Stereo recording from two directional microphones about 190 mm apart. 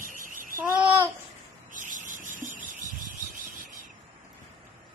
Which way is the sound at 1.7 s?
45° right (ahead or behind).